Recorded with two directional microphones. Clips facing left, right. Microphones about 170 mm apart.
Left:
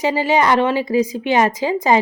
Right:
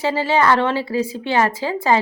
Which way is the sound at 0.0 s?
15° left (ahead or behind).